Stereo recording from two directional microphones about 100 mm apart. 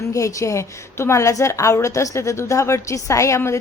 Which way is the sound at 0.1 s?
30° left (ahead or behind).